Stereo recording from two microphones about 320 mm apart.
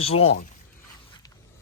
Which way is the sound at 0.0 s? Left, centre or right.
Centre.